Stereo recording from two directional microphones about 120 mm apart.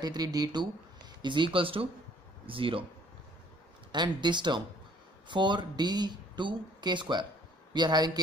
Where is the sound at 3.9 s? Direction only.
40° right (ahead or behind).